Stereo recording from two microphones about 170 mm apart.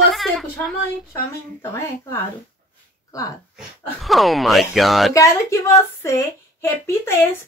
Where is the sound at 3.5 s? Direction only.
Centre (ahead or behind).